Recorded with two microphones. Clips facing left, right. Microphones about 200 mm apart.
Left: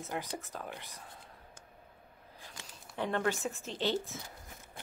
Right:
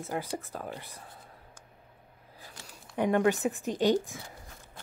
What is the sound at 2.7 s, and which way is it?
Speech, 15° right (ahead or behind).